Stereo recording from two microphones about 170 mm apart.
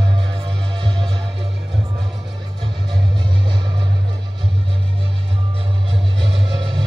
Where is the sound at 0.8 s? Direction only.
30° right (ahead or behind).